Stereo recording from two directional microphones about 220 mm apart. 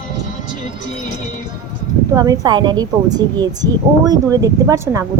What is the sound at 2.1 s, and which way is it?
A woman's voice, 15° right (ahead or behind).